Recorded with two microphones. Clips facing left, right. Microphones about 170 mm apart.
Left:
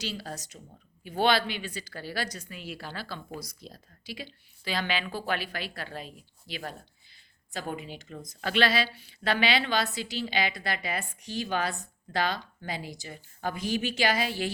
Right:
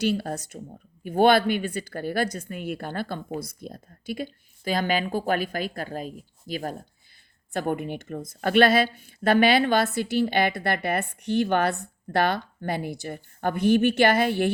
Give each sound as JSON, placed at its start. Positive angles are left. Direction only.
{"t": 0.0, "sound": "a woman's voice", "side_deg": -55}